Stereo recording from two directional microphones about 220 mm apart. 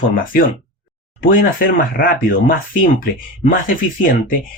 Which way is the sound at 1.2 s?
40° left (ahead or behind).